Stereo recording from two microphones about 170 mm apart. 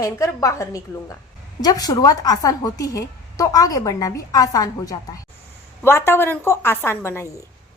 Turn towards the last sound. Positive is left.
turn(degrees=15)  # may be behind; listen again after turning